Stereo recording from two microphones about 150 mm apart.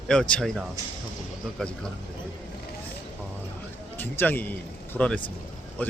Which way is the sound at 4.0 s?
15° left (ahead or behind).